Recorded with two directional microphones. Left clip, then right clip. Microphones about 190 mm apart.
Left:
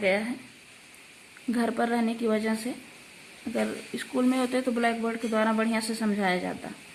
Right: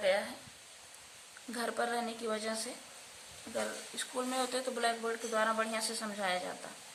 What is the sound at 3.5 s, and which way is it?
Speech, 55° left (ahead or behind).